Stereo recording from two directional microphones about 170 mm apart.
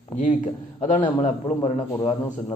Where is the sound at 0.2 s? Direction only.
45° left (ahead or behind).